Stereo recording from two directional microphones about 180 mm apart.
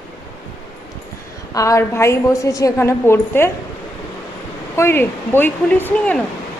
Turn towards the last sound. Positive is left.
turn(degrees=10)  # may be behind; listen again after turning